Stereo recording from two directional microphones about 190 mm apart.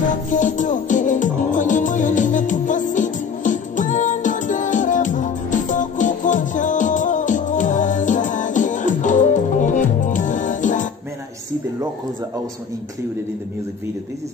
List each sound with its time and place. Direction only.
0.3 s music: 40° left (ahead or behind)